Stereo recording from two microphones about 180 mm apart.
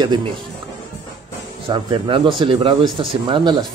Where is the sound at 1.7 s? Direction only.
25° right (ahead or behind).